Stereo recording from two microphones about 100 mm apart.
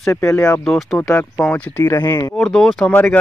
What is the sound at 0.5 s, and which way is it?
Speech, 5° left (ahead or behind).